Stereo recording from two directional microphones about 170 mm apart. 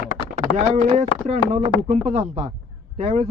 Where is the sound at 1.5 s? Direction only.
35° right (ahead or behind).